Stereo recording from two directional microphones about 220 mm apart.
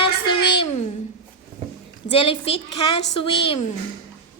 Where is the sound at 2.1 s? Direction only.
25° left (ahead or behind).